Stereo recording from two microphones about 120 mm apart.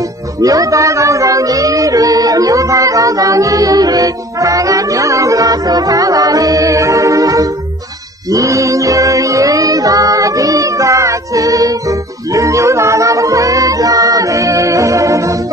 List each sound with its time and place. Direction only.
0.4 s music: 30° right (ahead or behind)